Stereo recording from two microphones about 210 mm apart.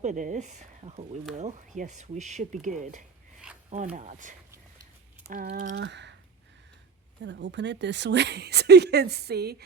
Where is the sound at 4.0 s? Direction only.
35° right (ahead or behind).